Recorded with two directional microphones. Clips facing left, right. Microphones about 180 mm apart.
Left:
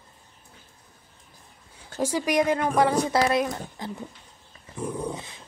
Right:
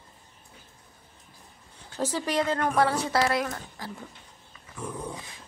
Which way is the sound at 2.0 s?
10° left (ahead or behind).